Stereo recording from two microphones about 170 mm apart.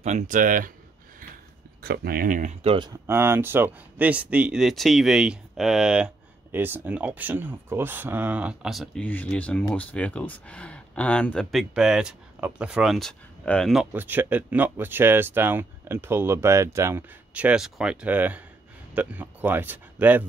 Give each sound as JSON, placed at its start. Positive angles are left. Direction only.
{"t": 0.0, "sound": "speech", "side_deg": -45}
{"t": 1.8, "sound": "speech", "side_deg": -60}
{"t": 3.1, "sound": "speech", "side_deg": -15}
{"t": 13.9, "sound": "speech", "side_deg": -10}